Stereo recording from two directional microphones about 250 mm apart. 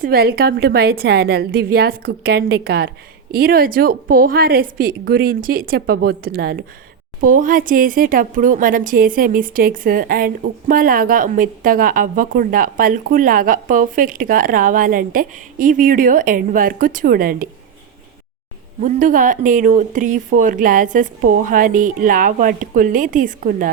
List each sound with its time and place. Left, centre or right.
0.0 s speech: right
18.8 s speech: right